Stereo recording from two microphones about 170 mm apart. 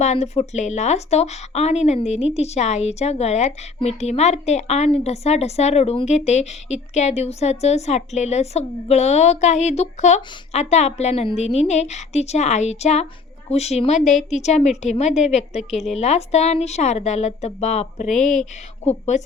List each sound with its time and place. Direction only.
0.0 s a woman's voice: 40° left (ahead or behind)